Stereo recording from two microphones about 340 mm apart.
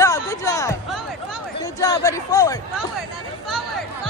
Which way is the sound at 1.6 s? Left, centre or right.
Centre.